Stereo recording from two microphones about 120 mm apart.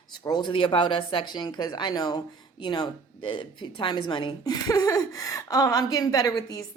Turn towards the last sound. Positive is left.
turn(degrees=30)  # may be behind; listen again after turning